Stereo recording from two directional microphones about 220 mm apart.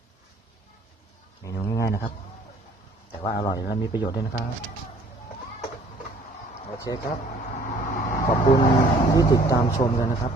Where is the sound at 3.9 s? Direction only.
20° left (ahead or behind).